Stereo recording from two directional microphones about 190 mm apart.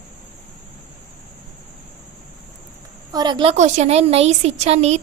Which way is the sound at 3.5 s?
35° right (ahead or behind).